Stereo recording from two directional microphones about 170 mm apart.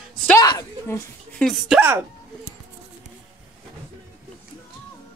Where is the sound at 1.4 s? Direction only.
Centre (ahead or behind).